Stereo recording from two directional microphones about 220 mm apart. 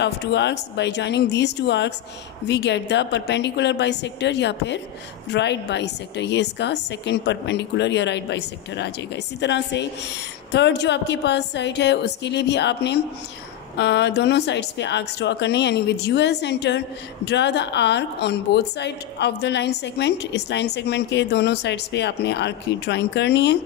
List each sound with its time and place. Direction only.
0.0 s a woman's voice: 50° left (ahead or behind)